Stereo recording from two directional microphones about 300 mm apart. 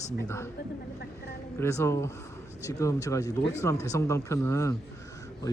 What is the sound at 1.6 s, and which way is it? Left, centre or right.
A man's voice, centre.